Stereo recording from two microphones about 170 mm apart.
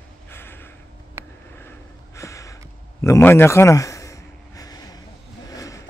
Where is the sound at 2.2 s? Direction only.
15° left (ahead or behind).